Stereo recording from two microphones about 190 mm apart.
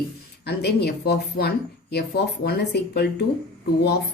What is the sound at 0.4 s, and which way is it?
Speech, 60° left (ahead or behind).